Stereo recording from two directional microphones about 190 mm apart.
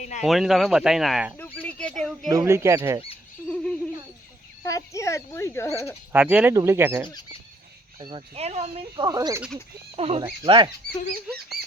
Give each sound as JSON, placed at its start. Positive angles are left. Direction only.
{"t": 0.0, "sound": "a man's voice", "side_deg": 40}
{"t": 0.3, "sound": "speech", "side_deg": 0}
{"t": 1.5, "sound": "a sound", "side_deg": 5}
{"t": 2.3, "sound": "speech", "side_deg": -15}
{"t": 3.5, "sound": "a sound", "side_deg": 5}
{"t": 4.6, "sound": "speech", "side_deg": 15}
{"t": 6.1, "sound": "speech", "side_deg": -5}
{"t": 7.9, "sound": "speech", "side_deg": -25}
{"t": 9.0, "sound": "speech", "side_deg": -20}
{"t": 9.9, "sound": "speech", "side_deg": -30}